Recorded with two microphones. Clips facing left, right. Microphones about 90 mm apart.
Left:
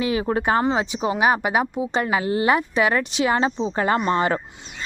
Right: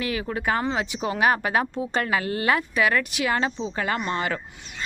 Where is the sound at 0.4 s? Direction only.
25° left (ahead or behind).